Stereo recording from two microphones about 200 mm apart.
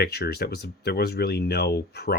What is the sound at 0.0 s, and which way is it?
Speech, 55° left (ahead or behind).